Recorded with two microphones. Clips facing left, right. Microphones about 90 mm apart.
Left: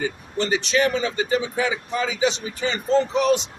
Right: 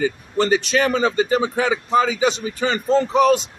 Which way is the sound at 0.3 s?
45° right (ahead or behind).